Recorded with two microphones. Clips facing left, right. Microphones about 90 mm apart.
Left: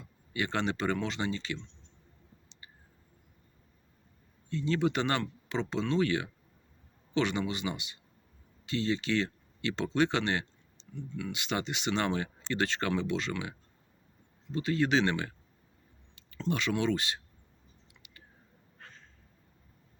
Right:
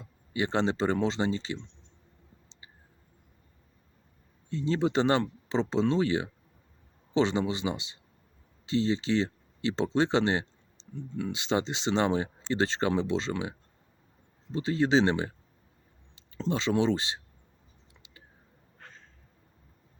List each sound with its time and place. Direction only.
0.0 s speech: 25° right (ahead or behind)
2.5 s a sound: 25° right (ahead or behind)
4.4 s speech: 25° right (ahead or behind)